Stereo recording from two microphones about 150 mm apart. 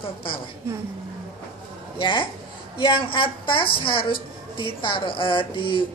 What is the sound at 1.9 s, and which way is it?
A woman's voice, 35° left (ahead or behind).